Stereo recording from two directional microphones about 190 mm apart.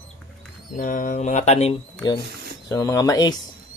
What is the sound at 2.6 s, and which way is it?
Speech, 15° left (ahead or behind).